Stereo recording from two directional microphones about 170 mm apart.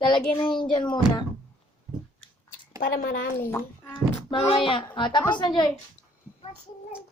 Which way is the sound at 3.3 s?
15° left (ahead or behind).